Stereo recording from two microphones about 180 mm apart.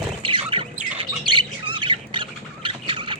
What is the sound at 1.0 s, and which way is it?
Squawk, 25° right (ahead or behind).